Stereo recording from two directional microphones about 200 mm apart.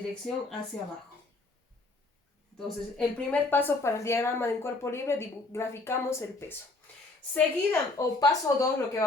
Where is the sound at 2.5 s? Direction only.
Centre (ahead or behind).